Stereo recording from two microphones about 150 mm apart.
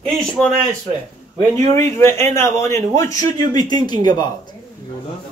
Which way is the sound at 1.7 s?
15° left (ahead or behind).